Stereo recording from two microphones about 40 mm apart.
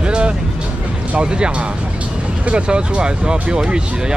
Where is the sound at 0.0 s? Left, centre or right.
Right.